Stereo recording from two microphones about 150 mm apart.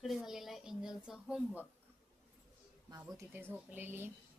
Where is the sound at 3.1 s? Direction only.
15° right (ahead or behind).